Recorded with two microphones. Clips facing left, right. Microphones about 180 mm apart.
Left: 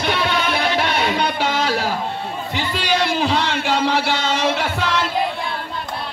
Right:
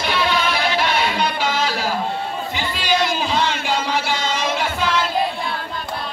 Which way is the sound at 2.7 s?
65° left (ahead or behind).